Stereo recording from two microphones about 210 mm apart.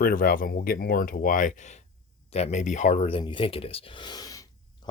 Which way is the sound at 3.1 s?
25° left (ahead or behind).